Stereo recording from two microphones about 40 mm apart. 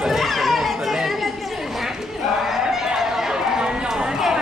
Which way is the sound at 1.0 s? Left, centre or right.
Centre.